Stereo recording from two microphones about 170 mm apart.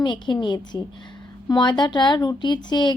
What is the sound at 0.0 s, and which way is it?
Speech, 25° left (ahead or behind).